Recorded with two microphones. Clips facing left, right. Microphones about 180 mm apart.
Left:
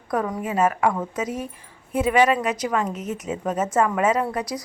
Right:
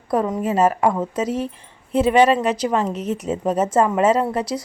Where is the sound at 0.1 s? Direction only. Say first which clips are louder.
Right 5 dB; 30° right (ahead or behind).